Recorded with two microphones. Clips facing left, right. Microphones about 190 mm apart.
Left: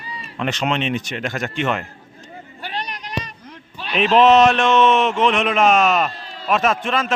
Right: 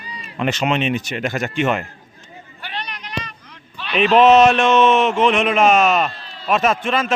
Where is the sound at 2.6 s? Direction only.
40° left (ahead or behind).